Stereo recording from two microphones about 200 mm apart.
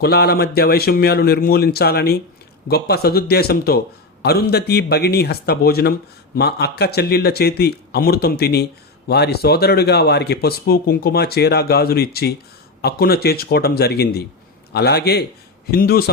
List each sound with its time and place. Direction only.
0.0 s speech: 55° left (ahead or behind)